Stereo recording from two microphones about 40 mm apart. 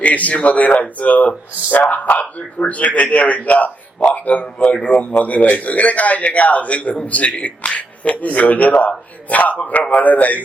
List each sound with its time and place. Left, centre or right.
0.0 s a man's voice: left